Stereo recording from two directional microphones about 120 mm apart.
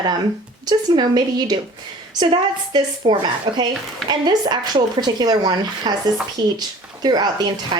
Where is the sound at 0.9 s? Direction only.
40° right (ahead or behind).